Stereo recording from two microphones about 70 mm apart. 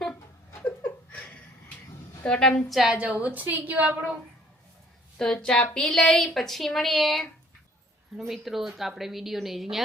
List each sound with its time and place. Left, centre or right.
0.6 s a sound: left
2.2 s speech: centre
2.9 s a woman's voice: centre
5.1 s a woman's voice: centre
8.3 s speech: centre